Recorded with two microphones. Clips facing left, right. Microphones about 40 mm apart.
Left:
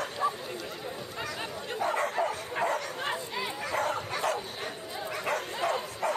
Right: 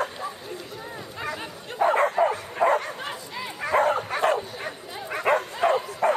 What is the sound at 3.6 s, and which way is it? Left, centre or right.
Dog, right.